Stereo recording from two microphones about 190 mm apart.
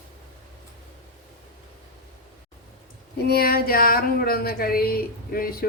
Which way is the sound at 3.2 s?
55° left (ahead or behind).